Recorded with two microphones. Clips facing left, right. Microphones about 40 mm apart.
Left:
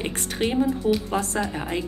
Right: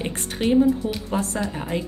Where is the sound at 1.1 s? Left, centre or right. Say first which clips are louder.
Even; left.